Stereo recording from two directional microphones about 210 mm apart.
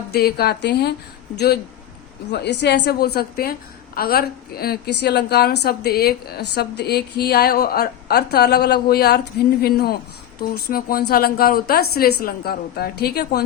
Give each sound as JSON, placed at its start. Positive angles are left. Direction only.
{"t": 0.1, "sound": "a woman's voice", "side_deg": 50}
{"t": 2.3, "sound": "a woman's voice", "side_deg": 55}